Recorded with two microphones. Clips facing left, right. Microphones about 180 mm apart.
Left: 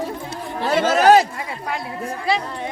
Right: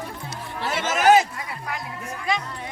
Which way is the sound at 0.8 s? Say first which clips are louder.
Left 4 dB; 35° left (ahead or behind).